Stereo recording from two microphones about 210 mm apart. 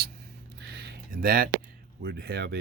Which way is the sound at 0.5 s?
50° right (ahead or behind).